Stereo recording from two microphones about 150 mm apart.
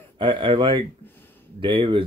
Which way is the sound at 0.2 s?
35° right (ahead or behind).